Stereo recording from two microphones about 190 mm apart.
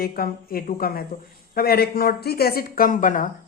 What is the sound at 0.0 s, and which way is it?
Speech, 50° left (ahead or behind).